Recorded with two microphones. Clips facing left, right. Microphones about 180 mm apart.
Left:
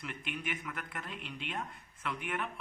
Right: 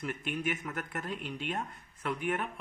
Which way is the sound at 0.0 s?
45° right (ahead or behind).